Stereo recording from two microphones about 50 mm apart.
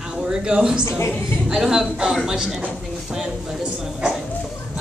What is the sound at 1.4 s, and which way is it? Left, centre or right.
Speech, centre.